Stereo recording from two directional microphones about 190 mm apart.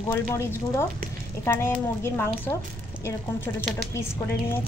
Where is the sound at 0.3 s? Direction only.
10° left (ahead or behind).